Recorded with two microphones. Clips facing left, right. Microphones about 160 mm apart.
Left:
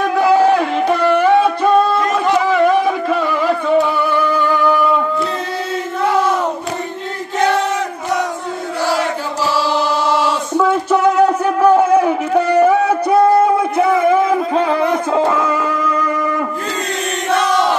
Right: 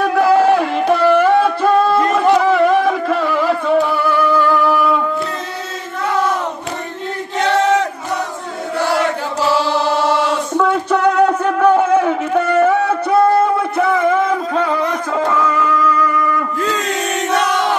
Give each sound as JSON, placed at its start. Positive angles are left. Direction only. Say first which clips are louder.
{"t": 0.0, "sound": "a sound", "louder": "even", "side_deg": -5}
{"t": 10.6, "sound": "music", "louder": "left 2 dB", "side_deg": 5}
{"t": 14.5, "sound": "music", "louder": "left 2 dB", "side_deg": 20}